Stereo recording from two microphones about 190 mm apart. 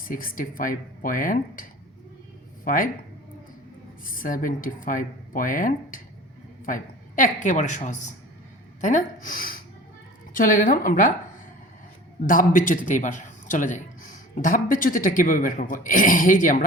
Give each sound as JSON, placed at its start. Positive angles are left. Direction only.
{"t": 0.0, "sound": "speech", "side_deg": 50}
{"t": 2.6, "sound": "speech", "side_deg": 45}
{"t": 4.0, "sound": "speech", "side_deg": 45}
{"t": 12.2, "sound": "speech", "side_deg": 45}